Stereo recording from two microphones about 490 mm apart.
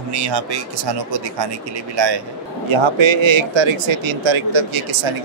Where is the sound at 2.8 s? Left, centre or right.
Right.